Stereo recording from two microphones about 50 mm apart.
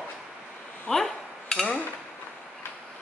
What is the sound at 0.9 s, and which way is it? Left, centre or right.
Dishes, centre.